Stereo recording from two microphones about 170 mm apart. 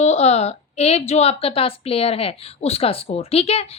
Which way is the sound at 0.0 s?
40° left (ahead or behind).